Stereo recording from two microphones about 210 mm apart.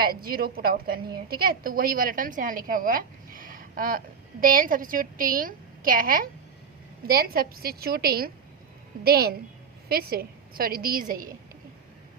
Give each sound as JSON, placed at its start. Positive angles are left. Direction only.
{"t": 0.0, "sound": "a woman's voice", "side_deg": -45}